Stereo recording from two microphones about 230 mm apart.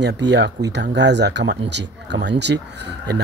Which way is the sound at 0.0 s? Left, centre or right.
Right.